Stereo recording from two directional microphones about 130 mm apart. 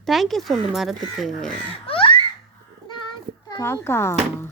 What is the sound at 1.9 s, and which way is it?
Laughter, 45° left (ahead or behind).